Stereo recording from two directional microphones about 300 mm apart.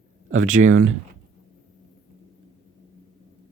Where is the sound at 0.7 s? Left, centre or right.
Right.